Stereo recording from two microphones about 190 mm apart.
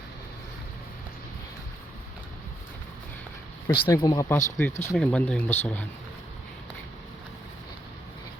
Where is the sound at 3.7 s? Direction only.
20° left (ahead or behind).